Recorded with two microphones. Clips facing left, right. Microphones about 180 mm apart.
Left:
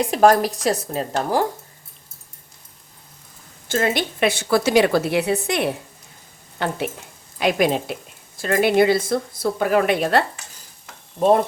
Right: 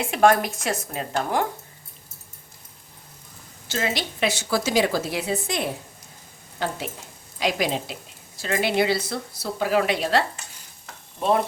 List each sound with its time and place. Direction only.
0.0 s speech: 35° left (ahead or behind)
3.7 s a woman's voice: 50° left (ahead or behind)